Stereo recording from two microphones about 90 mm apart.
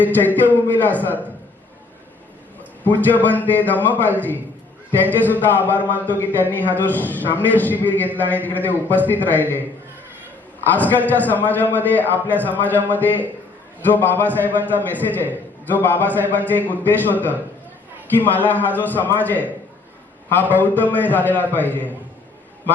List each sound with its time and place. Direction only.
0.0 s a man's voice: 20° left (ahead or behind)
2.8 s a man's voice: 20° left (ahead or behind)
5.5 s a man's voice: 20° left (ahead or behind)
10.7 s a man's voice: 20° left (ahead or behind)